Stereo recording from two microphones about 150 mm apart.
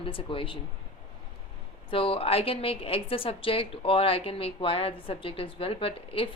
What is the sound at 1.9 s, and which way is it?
A woman's voice, 40° left (ahead or behind).